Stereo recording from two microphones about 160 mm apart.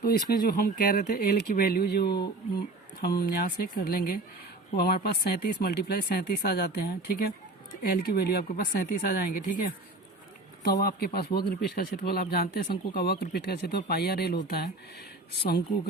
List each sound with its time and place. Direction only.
0.0 s speech: 70° left (ahead or behind); by 2.2 s 90° left
3.0 s speech: 75° left (ahead or behind)
8.4 s speech: 70° left (ahead or behind)
10.6 s speech: 75° left (ahead or behind)